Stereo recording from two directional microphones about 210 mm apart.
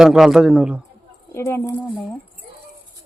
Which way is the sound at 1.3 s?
10° left (ahead or behind).